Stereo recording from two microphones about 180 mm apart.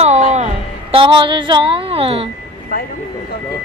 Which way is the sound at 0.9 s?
30° right (ahead or behind).